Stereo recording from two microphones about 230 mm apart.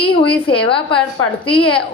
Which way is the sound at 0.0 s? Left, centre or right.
Left.